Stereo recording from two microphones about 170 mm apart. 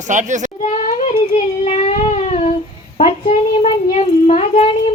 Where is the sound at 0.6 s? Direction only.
40° left (ahead or behind).